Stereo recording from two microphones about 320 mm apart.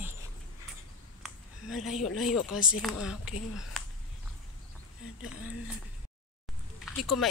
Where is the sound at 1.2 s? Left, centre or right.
Centre.